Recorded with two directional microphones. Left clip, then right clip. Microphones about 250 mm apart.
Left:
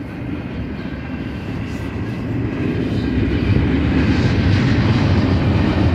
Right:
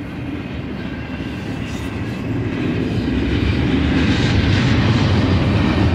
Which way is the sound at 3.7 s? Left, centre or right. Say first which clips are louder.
Right 2 dB; right.